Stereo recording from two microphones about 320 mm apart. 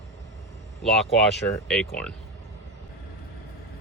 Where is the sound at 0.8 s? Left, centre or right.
Centre.